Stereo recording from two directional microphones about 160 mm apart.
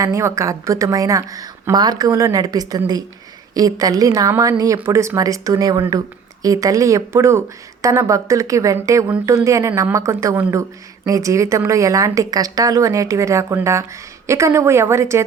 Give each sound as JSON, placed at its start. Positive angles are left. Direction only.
{"t": 0.0, "sound": "a woman's voice", "side_deg": -20}